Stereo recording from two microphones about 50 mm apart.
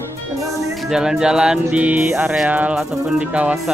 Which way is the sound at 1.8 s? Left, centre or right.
Right.